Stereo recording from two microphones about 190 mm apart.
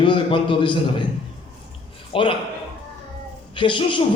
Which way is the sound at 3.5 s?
25° left (ahead or behind).